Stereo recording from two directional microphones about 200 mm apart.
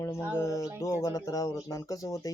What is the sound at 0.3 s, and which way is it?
Speech, 15° left (ahead or behind).